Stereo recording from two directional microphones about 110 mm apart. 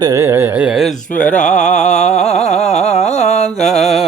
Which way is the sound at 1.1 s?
10° left (ahead or behind).